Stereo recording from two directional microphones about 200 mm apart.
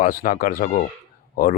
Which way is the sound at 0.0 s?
45° left (ahead or behind).